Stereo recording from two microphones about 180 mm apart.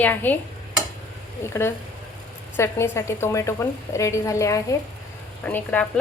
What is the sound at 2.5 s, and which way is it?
A woman's voice, 15° left (ahead or behind).